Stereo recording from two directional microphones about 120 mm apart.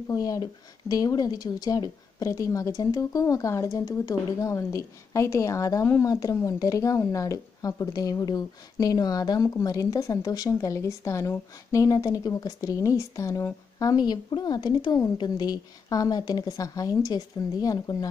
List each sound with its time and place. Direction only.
0.1 s speech: 30° left (ahead or behind)